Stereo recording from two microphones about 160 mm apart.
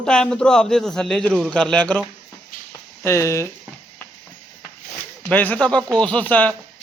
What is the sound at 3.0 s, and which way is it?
Speech, 20° left (ahead or behind).